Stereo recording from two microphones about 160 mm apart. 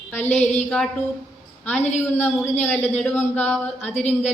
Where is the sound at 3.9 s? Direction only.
45° left (ahead or behind).